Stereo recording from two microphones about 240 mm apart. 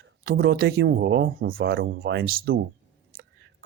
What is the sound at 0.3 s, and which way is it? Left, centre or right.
Speech, right.